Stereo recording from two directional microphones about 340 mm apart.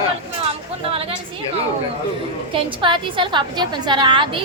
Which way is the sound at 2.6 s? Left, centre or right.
Centre.